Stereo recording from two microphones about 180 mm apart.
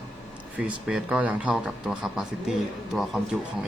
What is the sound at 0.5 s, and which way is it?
A man's voice, 5° right (ahead or behind).